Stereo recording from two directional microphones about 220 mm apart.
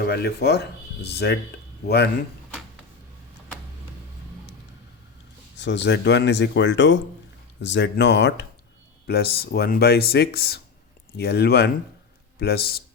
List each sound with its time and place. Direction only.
0.0 s speech: 45° left (ahead or behind)
5.5 s speech: 55° left (ahead or behind)